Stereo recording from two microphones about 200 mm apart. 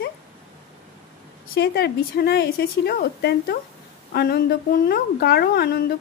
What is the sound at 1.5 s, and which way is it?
Speech, 55° left (ahead or behind).